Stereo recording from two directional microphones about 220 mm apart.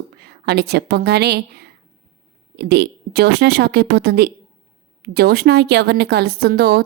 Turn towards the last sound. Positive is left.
turn(degrees=-45)  # may be behind; listen again after turning